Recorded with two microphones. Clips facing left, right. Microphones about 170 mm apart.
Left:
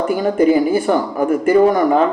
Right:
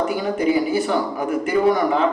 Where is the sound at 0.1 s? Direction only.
45° left (ahead or behind).